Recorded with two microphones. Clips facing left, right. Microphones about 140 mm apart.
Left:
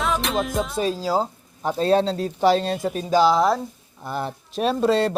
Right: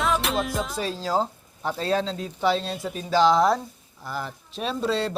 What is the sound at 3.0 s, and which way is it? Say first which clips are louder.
Speech: left 1 dB; 10° left (ahead or behind).